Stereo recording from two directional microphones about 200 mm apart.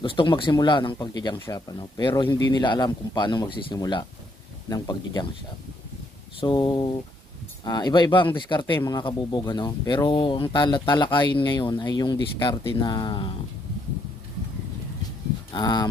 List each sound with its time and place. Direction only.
0.0 s speech: 25° left (ahead or behind)
6.4 s speech: 20° left (ahead or behind)
15.5 s speech: 20° left (ahead or behind)